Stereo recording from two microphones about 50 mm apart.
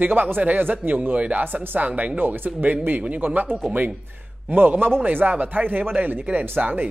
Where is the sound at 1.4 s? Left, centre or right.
Right.